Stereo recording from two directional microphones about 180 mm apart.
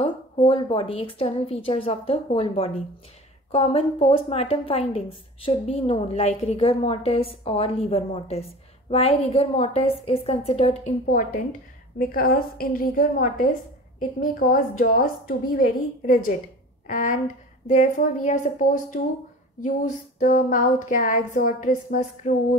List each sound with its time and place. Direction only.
0.0 s a woman's voice: 30° left (ahead or behind)
11.1 s a woman's voice: 50° left (ahead or behind)
20.2 s a woman's voice: 45° left (ahead or behind)